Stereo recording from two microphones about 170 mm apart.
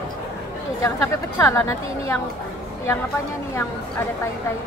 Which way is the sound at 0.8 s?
15° left (ahead or behind).